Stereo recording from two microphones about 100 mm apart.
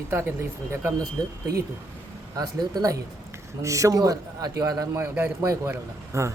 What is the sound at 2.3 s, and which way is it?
A man's voice, 40° right (ahead or behind).